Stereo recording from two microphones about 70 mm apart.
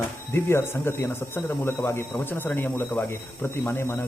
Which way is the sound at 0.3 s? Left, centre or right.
Left.